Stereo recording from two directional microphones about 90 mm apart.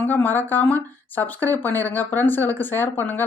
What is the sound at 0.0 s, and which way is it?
Speech, 25° left (ahead or behind).